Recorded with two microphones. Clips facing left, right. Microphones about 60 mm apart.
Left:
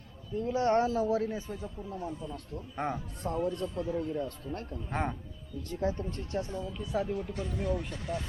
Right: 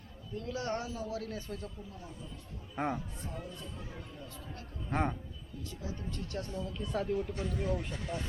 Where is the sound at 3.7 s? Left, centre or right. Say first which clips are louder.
Left 14 dB; left.